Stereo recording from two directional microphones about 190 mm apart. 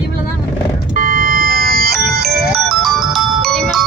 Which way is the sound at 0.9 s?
45° right (ahead or behind).